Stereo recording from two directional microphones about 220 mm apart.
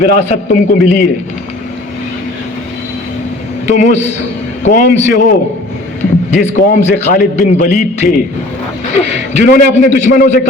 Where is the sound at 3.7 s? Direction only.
30° left (ahead or behind).